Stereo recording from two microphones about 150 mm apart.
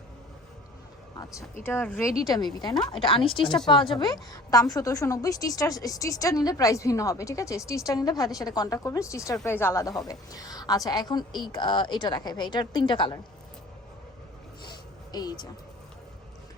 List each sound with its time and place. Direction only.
1.6 s speech: 10° left (ahead or behind)
2.2 s a woman's voice: 25° left (ahead or behind)
15.1 s a woman's voice: 25° left (ahead or behind)